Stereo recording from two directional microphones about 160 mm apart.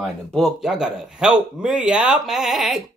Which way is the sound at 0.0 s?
Centre (ahead or behind).